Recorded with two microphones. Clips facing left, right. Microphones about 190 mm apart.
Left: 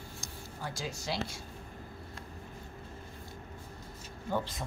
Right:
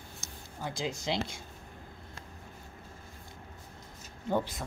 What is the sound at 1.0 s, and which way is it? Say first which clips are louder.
Speech: right 2 dB; 20° right (ahead or behind).